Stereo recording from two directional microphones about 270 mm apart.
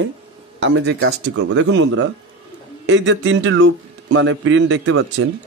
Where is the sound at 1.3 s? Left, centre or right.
Right.